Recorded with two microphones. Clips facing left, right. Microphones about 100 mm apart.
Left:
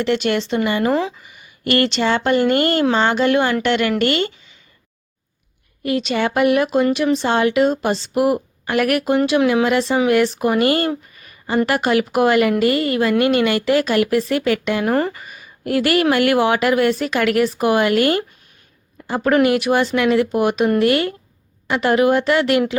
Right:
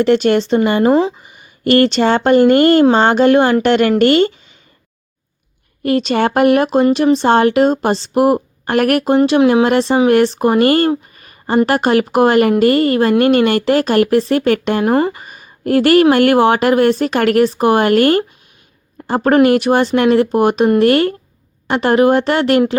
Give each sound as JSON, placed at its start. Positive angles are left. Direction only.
{"t": 0.0, "sound": "speech", "side_deg": -40}
{"t": 5.8, "sound": "speech", "side_deg": -45}
{"t": 7.0, "sound": "speech", "side_deg": -30}
{"t": 7.3, "sound": "speech", "side_deg": -45}
{"t": 9.1, "sound": "speech", "side_deg": -30}
{"t": 10.1, "sound": "speech", "side_deg": -45}
{"t": 14.8, "sound": "speech", "side_deg": -25}